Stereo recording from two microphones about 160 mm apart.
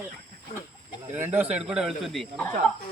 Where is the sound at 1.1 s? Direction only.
10° right (ahead or behind).